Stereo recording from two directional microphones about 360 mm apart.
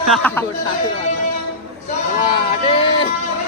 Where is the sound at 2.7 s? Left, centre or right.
Centre.